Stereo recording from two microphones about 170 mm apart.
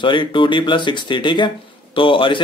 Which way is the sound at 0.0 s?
30° left (ahead or behind).